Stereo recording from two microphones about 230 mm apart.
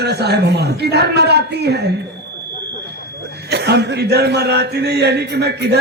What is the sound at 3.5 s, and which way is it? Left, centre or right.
A man's voice, right.